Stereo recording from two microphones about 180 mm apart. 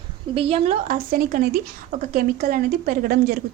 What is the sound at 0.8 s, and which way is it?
A woman's voice, 45° right (ahead or behind).